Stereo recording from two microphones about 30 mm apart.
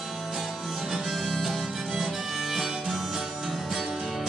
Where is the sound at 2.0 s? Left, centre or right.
Centre.